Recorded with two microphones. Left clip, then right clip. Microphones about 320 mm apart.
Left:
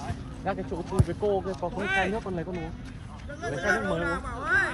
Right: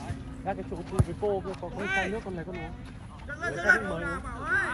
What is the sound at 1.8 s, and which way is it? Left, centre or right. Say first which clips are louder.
Speech: left 2 dB; left.